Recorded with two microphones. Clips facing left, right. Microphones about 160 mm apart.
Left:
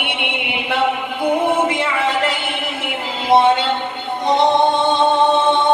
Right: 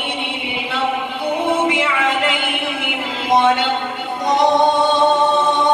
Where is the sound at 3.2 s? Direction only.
30° left (ahead or behind).